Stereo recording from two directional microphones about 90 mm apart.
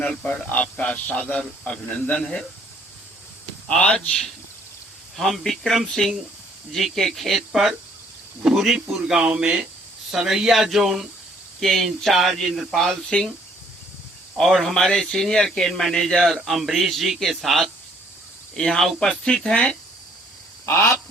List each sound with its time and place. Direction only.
0.1 s speech: 10° left (ahead or behind)
3.7 s speech: 10° left (ahead or behind)
14.3 s speech: centre (ahead or behind)
20.7 s duck: 25° left (ahead or behind)